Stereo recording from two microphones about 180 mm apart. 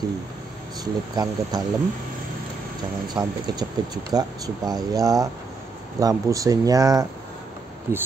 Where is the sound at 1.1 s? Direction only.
20° right (ahead or behind).